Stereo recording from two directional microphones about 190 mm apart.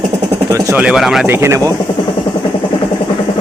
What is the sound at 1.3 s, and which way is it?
Speech, 15° right (ahead or behind).